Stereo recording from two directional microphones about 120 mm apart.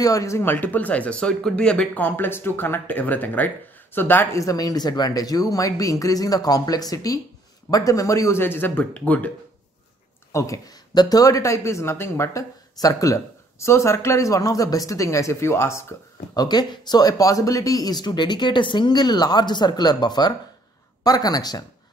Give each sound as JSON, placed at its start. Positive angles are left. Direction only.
{"t": 0.0, "sound": "speech", "side_deg": 30}
{"t": 10.3, "sound": "speech", "side_deg": 25}
{"t": 16.3, "sound": "speech", "side_deg": 35}